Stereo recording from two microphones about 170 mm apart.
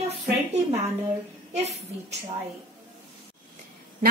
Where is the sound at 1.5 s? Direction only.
40° right (ahead or behind).